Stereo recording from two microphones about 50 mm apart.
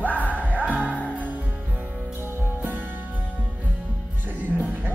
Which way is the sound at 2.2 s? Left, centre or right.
Left.